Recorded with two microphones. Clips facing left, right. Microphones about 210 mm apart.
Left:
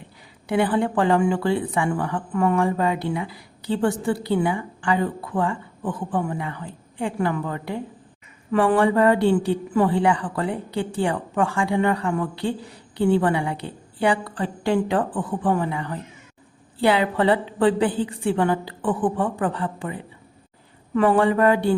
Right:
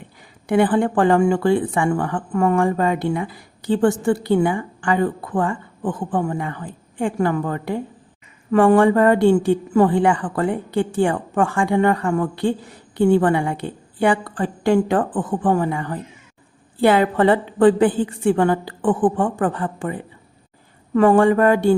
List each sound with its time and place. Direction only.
0.4 s speech: 50° right (ahead or behind)